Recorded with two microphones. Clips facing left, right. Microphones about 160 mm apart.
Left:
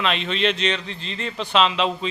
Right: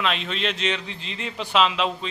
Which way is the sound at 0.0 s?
Centre (ahead or behind).